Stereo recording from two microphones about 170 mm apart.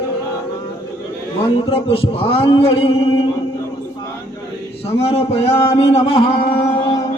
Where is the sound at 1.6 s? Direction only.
35° left (ahead or behind).